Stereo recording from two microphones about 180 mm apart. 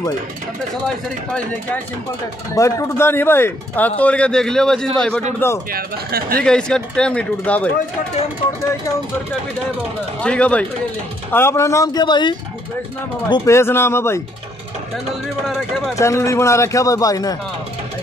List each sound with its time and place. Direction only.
0.8 s speech: 5° left (ahead or behind)
5.7 s speech: 55° right (ahead or behind)
6.4 s speech: 5° left (ahead or behind)
10.2 s speech: 5° left (ahead or behind)
15.4 s speech: centre (ahead or behind)
16.0 s speech: 15° left (ahead or behind)